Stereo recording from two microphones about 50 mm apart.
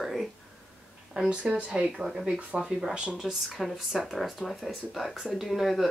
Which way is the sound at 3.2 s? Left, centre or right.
Centre.